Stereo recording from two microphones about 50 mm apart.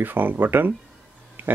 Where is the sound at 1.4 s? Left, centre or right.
Right.